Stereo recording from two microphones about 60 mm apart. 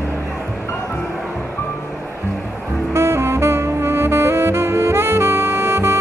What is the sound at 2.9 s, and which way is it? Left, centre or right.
Saxophone, right.